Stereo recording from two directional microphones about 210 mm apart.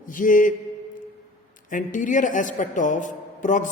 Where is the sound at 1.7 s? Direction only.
40° left (ahead or behind).